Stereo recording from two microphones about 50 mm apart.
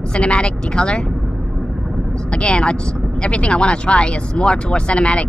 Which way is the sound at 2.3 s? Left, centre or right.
Centre.